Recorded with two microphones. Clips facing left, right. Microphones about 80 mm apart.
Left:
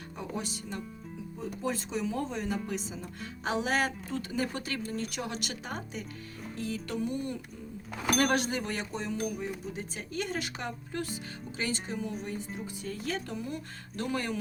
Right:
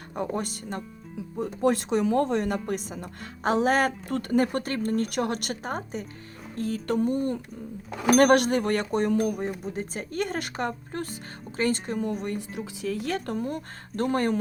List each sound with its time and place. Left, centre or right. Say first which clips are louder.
0.2 s speech: right 8 dB; right
1.6 s speech: right 10 dB; right
8.1 s speech: right 9 dB; right
12.5 s speech: right 7 dB; right